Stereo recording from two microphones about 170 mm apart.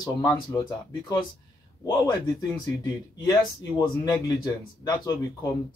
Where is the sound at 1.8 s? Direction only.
20° left (ahead or behind).